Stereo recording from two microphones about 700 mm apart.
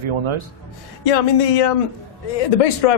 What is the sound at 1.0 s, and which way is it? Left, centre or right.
Speech, left.